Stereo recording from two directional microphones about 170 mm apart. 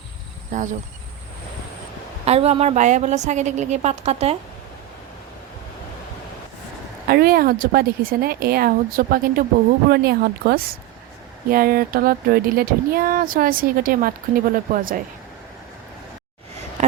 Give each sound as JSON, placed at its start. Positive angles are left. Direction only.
{"t": 0.5, "sound": "speech", "side_deg": -45}
{"t": 2.2, "sound": "a woman's voice", "side_deg": -40}
{"t": 7.1, "sound": "speech", "side_deg": -65}